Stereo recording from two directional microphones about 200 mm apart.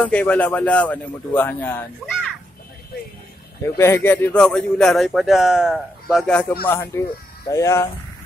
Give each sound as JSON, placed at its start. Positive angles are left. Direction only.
{"t": 0.0, "sound": "speech", "side_deg": 5}
{"t": 3.6, "sound": "speech", "side_deg": 15}